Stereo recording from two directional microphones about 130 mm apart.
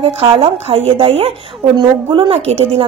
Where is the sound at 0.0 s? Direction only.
50° right (ahead or behind).